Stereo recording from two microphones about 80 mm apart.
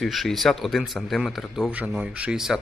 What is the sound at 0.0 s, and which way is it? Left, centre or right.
A man's voice, centre.